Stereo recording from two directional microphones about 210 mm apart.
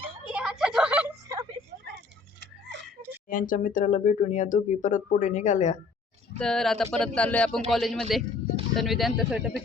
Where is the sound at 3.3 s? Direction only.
40° left (ahead or behind).